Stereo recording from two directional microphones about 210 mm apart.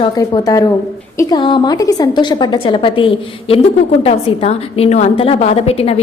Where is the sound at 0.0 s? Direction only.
15° left (ahead or behind).